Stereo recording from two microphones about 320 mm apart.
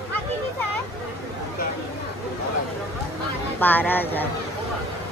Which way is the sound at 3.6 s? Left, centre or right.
Centre.